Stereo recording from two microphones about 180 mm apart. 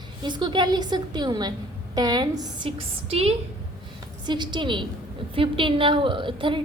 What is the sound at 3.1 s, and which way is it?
Speech, 35° right (ahead or behind).